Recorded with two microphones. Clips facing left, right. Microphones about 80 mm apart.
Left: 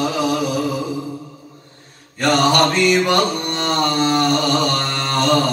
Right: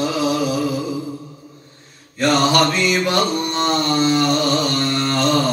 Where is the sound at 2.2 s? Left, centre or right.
Left.